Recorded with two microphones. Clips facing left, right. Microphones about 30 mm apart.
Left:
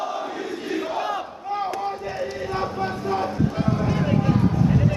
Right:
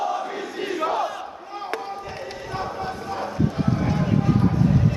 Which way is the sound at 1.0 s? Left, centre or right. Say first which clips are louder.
Left 1 dB; centre.